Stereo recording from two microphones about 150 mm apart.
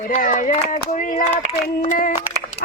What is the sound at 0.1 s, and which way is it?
Speech, 60° left (ahead or behind).